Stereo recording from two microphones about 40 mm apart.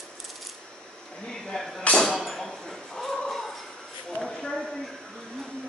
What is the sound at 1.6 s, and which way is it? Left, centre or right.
Speech, centre.